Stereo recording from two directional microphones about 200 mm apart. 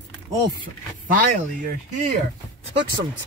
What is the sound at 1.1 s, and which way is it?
Speech, 45° right (ahead or behind).